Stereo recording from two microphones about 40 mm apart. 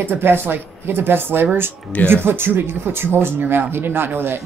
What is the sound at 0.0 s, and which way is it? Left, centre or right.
Speech, right.